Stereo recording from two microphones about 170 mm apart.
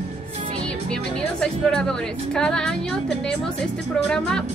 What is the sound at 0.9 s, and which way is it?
A woman's voice, 5° left (ahead or behind).